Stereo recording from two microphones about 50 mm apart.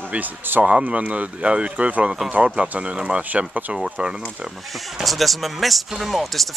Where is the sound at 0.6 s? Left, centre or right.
Right.